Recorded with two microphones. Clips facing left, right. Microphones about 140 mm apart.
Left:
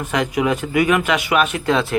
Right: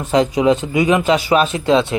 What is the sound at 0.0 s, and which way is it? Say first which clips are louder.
Speech: right 5 dB; 30° right (ahead or behind).